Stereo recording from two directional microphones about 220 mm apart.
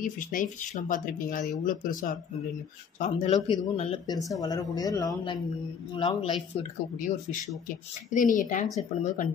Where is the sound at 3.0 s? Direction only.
30° left (ahead or behind).